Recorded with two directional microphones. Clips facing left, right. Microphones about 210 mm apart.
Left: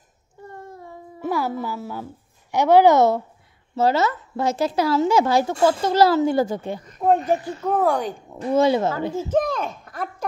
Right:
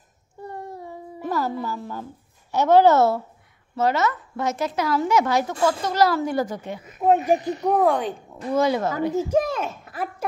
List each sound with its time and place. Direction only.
0.5 s child singing: 15° right (ahead or behind)
1.2 s a woman's voice: 10° left (ahead or behind)
3.7 s a woman's voice: 30° left (ahead or behind)
6.8 s speech: 5° right (ahead or behind)
7.3 s speech: 20° right (ahead or behind)
7.8 s speech: centre (ahead or behind)
8.4 s a woman's voice: 25° left (ahead or behind)
9.1 s speech: 15° right (ahead or behind)